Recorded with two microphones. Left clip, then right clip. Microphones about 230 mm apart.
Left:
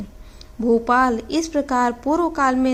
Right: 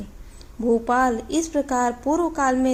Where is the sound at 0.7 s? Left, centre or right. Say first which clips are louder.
Left 3 dB; left.